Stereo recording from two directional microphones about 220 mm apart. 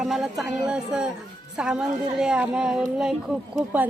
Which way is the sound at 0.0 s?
Centre (ahead or behind).